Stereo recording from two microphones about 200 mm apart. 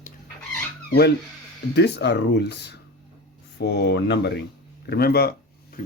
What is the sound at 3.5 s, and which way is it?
Speech, 55° left (ahead or behind).